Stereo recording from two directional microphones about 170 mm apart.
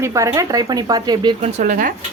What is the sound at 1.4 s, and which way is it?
Speech, 50° right (ahead or behind).